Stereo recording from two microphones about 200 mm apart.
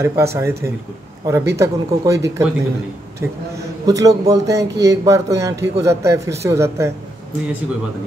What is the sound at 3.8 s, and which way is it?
A man's voice, 15° right (ahead or behind).